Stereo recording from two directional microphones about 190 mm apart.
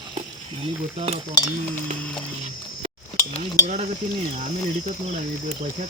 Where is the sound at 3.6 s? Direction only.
40° right (ahead or behind).